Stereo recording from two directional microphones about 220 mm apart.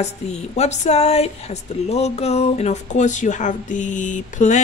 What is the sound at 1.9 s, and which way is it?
Speech, 30° left (ahead or behind).